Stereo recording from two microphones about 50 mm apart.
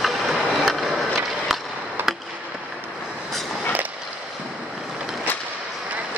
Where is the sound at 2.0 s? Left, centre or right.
Right.